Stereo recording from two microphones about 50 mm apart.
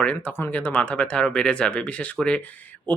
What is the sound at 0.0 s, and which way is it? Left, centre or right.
Speech, left.